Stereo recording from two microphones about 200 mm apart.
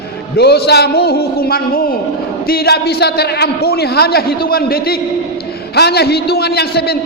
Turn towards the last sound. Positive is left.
turn(degrees=50)  # may be behind; listen again after turning